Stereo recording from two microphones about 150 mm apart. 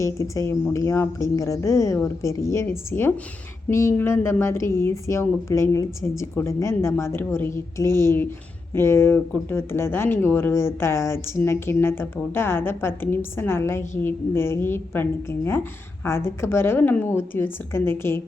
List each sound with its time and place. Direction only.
0.0 s a woman's voice: 20° left (ahead or behind)